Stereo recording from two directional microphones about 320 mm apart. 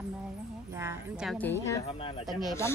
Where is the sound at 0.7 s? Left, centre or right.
Centre.